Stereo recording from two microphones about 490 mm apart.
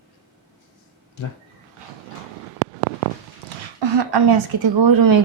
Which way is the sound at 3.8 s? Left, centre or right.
Right.